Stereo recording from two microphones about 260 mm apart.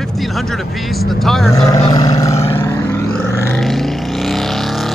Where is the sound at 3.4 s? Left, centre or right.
Centre.